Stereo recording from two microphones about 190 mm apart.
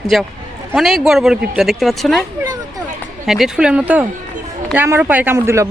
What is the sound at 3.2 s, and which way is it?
Speech, centre (ahead or behind).